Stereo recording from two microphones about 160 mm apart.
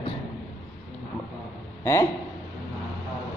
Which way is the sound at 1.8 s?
15° left (ahead or behind).